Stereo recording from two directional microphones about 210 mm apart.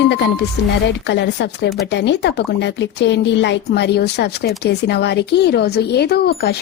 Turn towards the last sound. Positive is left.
turn(degrees=50)  # may be behind; listen again after turning